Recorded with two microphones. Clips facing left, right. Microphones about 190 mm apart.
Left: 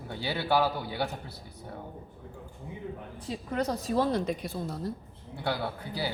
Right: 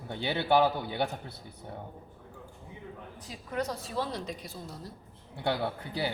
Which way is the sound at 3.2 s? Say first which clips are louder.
Left 3 dB; 30° left (ahead or behind).